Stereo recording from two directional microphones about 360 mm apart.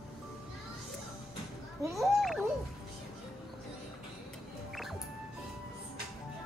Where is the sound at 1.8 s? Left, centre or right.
Centre.